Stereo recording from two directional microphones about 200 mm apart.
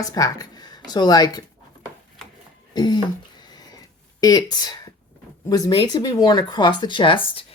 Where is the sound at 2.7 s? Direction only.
20° left (ahead or behind).